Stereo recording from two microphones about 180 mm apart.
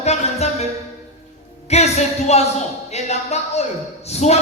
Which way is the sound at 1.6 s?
35° left (ahead or behind).